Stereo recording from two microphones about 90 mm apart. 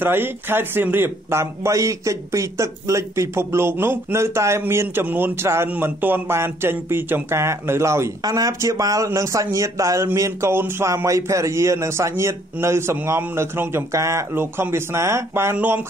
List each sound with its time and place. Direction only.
0.0 s speech: 25° right (ahead or behind)
8.2 s speech: 45° right (ahead or behind); by 15.8 s 20° right (ahead or behind)